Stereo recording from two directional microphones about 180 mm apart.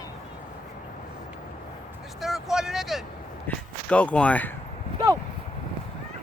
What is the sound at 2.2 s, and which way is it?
Vehicle, centre (ahead or behind).